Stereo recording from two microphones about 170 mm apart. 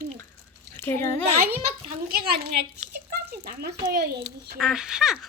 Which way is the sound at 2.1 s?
65° right (ahead or behind).